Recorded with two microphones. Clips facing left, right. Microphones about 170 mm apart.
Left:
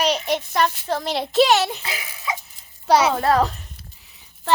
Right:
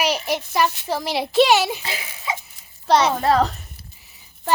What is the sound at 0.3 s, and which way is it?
A woman's voice, 5° right (ahead or behind).